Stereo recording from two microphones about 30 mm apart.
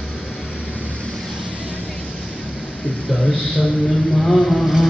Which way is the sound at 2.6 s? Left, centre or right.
Left.